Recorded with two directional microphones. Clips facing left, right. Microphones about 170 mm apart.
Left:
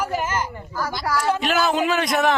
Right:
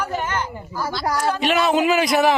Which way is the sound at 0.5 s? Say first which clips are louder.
Even; 15° right (ahead or behind).